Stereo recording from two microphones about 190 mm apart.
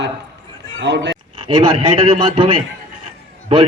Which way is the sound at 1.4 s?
30° right (ahead or behind).